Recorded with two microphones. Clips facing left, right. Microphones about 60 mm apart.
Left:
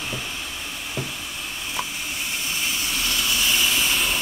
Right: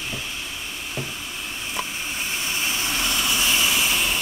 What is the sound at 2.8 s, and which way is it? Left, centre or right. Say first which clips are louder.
Vehicle: right 1 dB; right.